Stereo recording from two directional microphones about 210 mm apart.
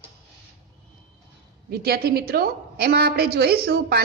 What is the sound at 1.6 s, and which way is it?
A woman's voice, 50° right (ahead or behind).